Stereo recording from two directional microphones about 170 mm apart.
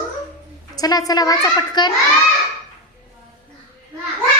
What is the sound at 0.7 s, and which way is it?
Child singing, 20° left (ahead or behind).